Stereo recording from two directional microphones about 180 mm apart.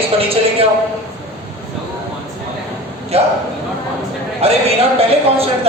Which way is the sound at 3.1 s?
35° right (ahead or behind).